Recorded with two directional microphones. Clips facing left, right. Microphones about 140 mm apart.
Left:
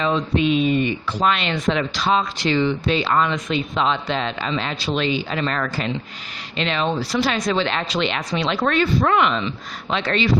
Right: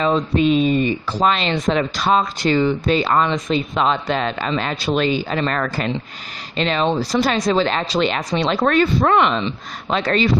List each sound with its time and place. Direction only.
0.0 s speech: 40° right (ahead or behind)
6.6 s speech: 40° right (ahead or behind)